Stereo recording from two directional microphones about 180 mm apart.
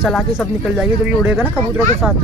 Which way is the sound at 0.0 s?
Centre (ahead or behind).